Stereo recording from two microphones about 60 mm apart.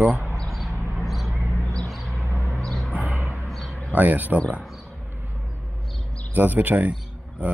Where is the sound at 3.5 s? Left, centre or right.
Centre.